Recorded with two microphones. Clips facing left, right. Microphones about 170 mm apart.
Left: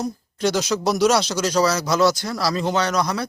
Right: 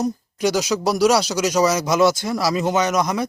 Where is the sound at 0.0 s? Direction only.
15° right (ahead or behind).